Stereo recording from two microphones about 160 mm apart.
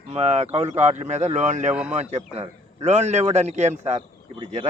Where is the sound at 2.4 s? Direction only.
45° right (ahead or behind).